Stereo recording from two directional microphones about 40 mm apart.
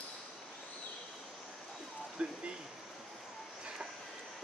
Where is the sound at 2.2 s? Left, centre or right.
Right.